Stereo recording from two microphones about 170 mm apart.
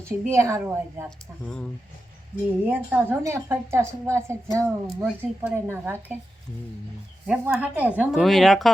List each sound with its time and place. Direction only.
0.0 s a woman's voice: 15° right (ahead or behind)
2.6 s a woman's voice: 10° right (ahead or behind)
7.3 s speech: 5° right (ahead or behind)